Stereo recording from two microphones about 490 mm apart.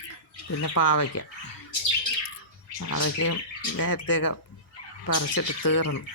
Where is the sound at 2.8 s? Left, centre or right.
Left.